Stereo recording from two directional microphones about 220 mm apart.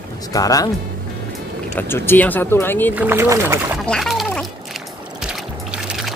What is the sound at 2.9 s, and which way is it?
Speech, 10° right (ahead or behind).